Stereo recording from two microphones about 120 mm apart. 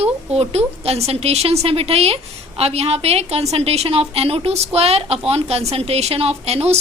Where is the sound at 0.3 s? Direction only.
60° right (ahead or behind).